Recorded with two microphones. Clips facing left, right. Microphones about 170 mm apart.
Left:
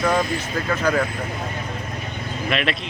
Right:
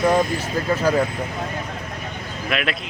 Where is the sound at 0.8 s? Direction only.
10° right (ahead or behind).